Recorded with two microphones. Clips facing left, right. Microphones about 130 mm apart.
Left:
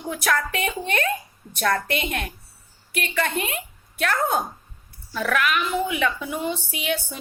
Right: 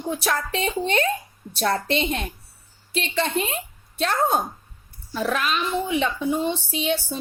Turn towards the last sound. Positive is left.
turn(degrees=-30)  # may be behind; listen again after turning